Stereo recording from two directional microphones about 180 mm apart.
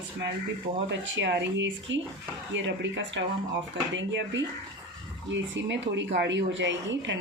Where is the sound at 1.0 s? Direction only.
85° right.